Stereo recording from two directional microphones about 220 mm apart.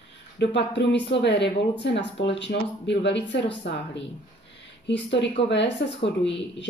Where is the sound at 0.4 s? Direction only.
50° left (ahead or behind).